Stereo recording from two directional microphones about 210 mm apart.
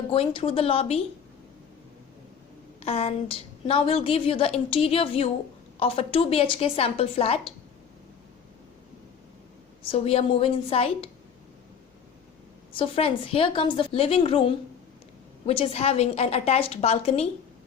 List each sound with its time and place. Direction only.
0.1 s a woman's voice: 25° left (ahead or behind)
2.8 s a woman's voice: 30° left (ahead or behind)
9.8 s a woman's voice: 25° left (ahead or behind)
12.7 s a woman's voice: 25° left (ahead or behind)